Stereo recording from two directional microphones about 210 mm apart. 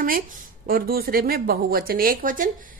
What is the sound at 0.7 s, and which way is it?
A woman's voice, 45° right (ahead or behind).